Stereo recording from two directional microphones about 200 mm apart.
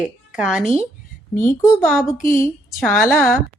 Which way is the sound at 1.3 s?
15° left (ahead or behind).